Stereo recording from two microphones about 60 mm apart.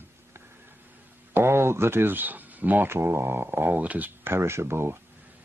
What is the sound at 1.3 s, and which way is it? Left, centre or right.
Speech, right.